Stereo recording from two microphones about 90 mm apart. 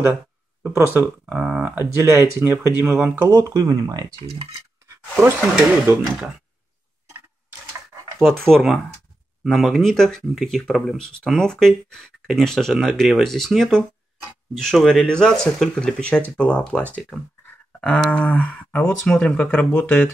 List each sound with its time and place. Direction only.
0.7 s speech: 25° right (ahead or behind)
1.2 s speech: 10° right (ahead or behind)
1.8 s speech: 25° right (ahead or behind)
3.3 s speech: 40° right (ahead or behind)
5.9 s speech: 25° right (ahead or behind)
8.2 s speech: centre (ahead or behind)
17.7 s a sound: 15° left (ahead or behind)
18.1 s speech: 15° left (ahead or behind)
18.9 s speech: 10° left (ahead or behind)